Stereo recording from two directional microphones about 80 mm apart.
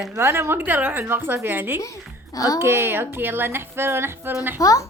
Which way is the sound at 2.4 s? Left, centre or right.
Left.